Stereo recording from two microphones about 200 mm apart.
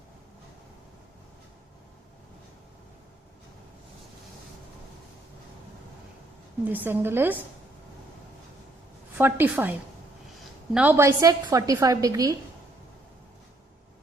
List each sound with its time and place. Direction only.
6.7 s a woman's voice: 10° right (ahead or behind)
9.1 s a woman's voice: 10° right (ahead or behind)
10.8 s a woman's voice: 10° right (ahead or behind)